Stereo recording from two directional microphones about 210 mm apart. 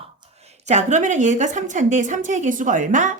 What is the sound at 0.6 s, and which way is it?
Speech, 35° right (ahead or behind).